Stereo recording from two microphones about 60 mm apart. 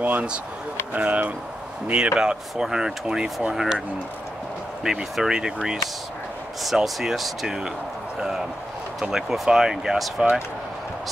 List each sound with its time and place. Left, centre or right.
0.0 s speech: right; by 3.8 s centre
4.8 s speech: centre
9.0 s speech: centre